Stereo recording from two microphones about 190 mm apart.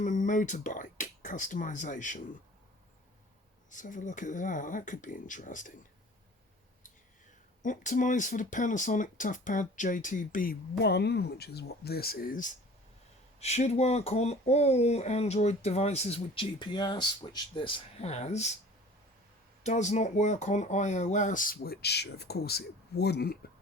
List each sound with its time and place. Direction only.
0.0 s speech: 40° left (ahead or behind)
3.7 s speech: 40° left (ahead or behind)
7.6 s speech: 40° left (ahead or behind)
19.6 s speech: 40° left (ahead or behind); by 23.4 s 60° left (ahead or behind)